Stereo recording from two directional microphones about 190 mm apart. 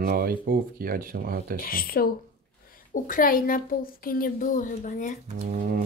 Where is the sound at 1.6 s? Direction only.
50° left (ahead or behind).